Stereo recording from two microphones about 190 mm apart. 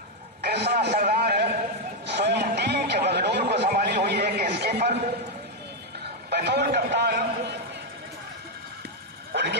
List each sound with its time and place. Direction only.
0.4 s a sound: 60° right (ahead or behind)
6.3 s a man's voice: 60° right (ahead or behind)
9.3 s vehicle: 65° right (ahead or behind)